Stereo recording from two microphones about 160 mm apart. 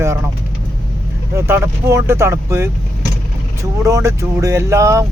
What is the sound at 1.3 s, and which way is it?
Speech, 15° right (ahead or behind).